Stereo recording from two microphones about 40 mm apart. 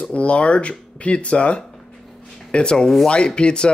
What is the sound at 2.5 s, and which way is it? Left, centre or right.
Speech, left.